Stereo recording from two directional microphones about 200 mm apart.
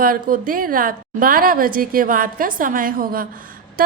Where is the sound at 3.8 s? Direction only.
45° right (ahead or behind).